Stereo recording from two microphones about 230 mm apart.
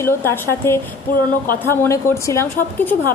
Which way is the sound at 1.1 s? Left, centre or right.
Left.